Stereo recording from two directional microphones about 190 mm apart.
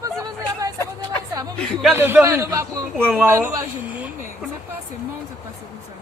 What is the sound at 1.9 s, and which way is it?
A man's voice, 10° right (ahead or behind).